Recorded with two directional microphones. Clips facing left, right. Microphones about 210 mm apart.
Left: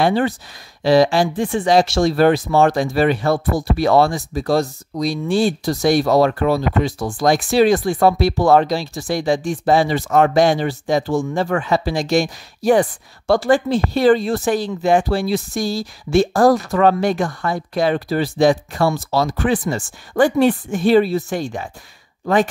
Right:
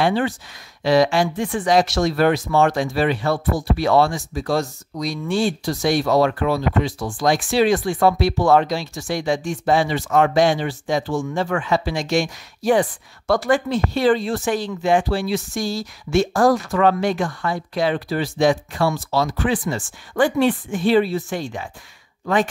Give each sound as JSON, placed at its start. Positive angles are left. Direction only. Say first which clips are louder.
{"t": 0.0, "sound": "speech", "louder": "left 3 dB", "side_deg": 40}